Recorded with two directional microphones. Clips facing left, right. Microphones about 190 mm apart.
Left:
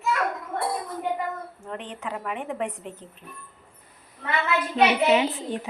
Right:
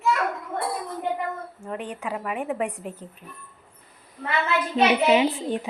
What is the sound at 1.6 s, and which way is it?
A woman's voice, 10° right (ahead or behind).